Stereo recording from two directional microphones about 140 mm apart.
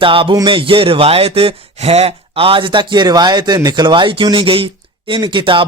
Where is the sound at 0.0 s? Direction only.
40° right (ahead or behind).